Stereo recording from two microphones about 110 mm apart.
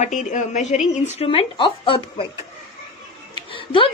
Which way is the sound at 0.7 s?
80° left.